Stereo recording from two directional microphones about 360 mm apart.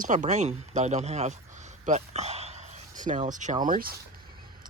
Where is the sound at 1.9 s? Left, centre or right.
Centre.